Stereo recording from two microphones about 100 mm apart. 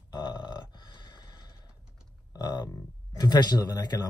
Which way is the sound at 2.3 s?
40° left (ahead or behind).